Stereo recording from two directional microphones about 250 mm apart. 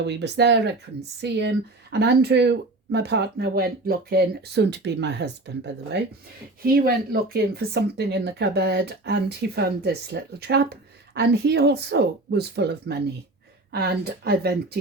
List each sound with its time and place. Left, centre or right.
0.0 s speech: right